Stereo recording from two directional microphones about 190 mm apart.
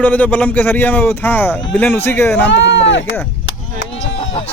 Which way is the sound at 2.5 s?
70° left (ahead or behind).